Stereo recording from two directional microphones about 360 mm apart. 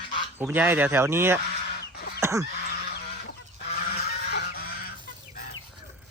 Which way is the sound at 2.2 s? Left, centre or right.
Centre.